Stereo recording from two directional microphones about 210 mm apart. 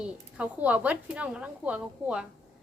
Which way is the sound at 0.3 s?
5° right (ahead or behind).